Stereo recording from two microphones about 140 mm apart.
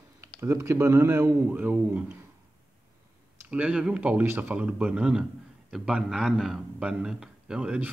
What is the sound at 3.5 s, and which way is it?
A man's voice, 10° right (ahead or behind).